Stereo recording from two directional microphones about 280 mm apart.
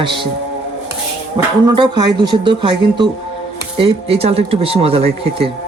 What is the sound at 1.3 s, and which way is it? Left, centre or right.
A man's voice, centre.